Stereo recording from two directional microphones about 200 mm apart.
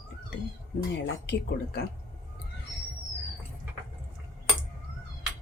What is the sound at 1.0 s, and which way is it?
Speech, 55° left (ahead or behind).